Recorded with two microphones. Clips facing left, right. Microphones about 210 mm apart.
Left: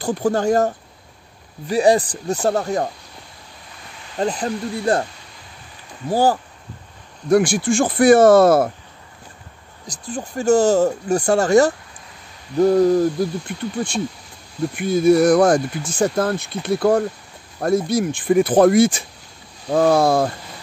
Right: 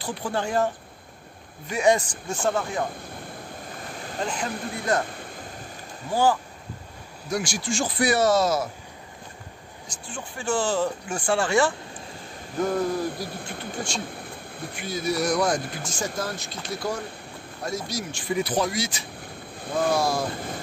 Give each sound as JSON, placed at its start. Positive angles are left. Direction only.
{"t": 0.0, "sound": "speech", "side_deg": 45}
{"t": 4.2, "sound": "speech", "side_deg": 35}
{"t": 5.1, "sound": "a sound", "side_deg": -50}
{"t": 6.0, "sound": "speech", "side_deg": 40}
{"t": 7.2, "sound": "speech", "side_deg": 55}
{"t": 9.8, "sound": "speech", "side_deg": 40}
{"t": 13.3, "sound": "speech", "side_deg": -55}
{"t": 13.6, "sound": "speech", "side_deg": 55}
{"t": 14.1, "sound": "a sound", "side_deg": -55}
{"t": 14.6, "sound": "speech", "side_deg": 55}
{"t": 20.3, "sound": "vehicle", "side_deg": -50}